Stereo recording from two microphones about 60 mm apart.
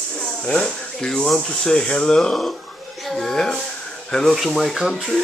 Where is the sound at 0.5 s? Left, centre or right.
Centre.